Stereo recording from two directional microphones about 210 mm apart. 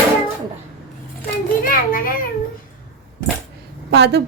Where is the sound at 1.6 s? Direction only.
40° left (ahead or behind).